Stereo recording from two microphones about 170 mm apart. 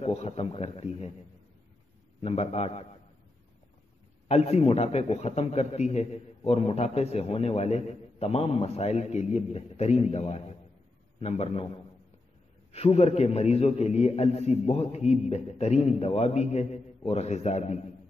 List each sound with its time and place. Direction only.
0.0 s a man's voice: 40° left (ahead or behind)
2.2 s a man's voice: 35° left (ahead or behind)
4.3 s a man's voice: 40° left (ahead or behind)
12.7 s a man's voice: 35° left (ahead or behind)